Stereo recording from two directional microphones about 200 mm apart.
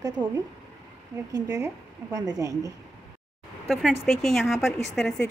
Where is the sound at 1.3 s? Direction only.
15° right (ahead or behind).